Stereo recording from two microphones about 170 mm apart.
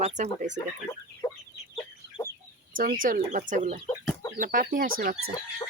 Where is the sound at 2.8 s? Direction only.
55° right (ahead or behind).